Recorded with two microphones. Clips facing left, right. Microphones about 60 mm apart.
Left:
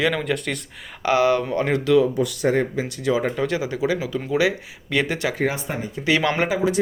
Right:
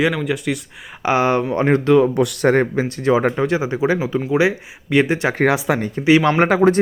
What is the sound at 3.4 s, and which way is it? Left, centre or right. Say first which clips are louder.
Speech: right 4 dB; right.